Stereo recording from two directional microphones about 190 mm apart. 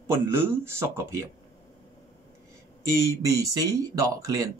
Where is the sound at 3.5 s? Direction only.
20° right (ahead or behind).